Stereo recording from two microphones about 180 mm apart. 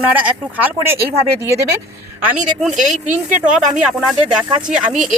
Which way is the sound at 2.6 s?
Centre (ahead or behind).